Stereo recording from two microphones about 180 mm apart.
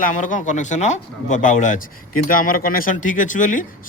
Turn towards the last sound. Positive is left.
turn(degrees=45)  # may be behind; listen again after turning